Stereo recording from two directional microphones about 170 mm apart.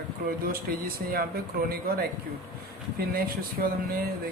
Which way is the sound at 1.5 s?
60° right (ahead or behind).